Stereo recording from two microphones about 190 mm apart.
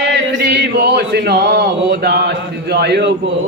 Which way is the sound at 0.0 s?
65° right (ahead or behind).